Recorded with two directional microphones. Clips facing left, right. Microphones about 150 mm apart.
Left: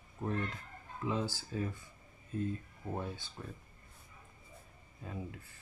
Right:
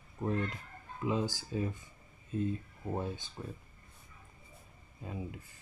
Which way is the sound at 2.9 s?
20° right (ahead or behind).